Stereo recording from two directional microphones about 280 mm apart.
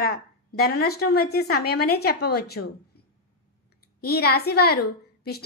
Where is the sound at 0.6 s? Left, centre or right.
Left.